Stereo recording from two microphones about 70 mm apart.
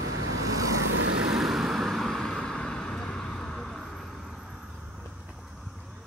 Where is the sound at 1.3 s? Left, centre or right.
Centre.